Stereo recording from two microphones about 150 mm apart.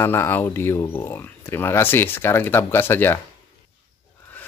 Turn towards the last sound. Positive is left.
turn(degrees=15)  # may be behind; listen again after turning